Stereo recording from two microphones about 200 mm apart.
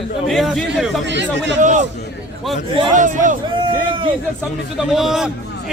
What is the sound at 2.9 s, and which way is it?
Speech, 40° right (ahead or behind).